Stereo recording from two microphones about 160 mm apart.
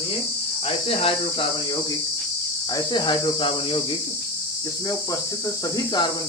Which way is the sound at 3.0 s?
30° left (ahead or behind).